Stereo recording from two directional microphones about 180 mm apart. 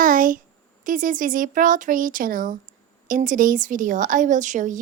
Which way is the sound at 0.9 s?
50° right (ahead or behind).